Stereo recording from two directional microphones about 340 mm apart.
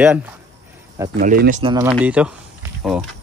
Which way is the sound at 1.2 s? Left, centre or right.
Right.